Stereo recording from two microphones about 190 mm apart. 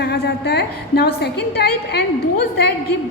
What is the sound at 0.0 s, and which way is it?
A woman's voice, 60° left (ahead or behind).